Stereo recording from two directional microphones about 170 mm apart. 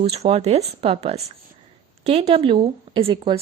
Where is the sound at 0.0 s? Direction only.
35° right (ahead or behind).